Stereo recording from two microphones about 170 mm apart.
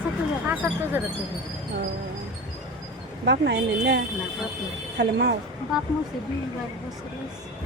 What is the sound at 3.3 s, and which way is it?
Speech, 90° right.